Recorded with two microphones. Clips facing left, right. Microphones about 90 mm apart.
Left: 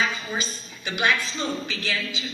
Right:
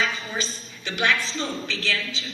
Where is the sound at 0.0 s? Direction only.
15° left (ahead or behind).